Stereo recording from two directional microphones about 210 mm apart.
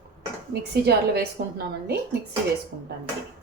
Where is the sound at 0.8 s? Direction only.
50° right (ahead or behind).